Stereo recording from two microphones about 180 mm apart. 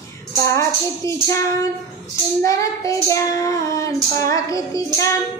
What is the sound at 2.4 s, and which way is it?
Child singing, 20° left (ahead or behind).